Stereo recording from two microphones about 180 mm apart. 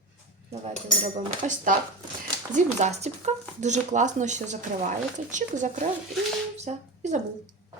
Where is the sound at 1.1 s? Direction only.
45° right (ahead or behind).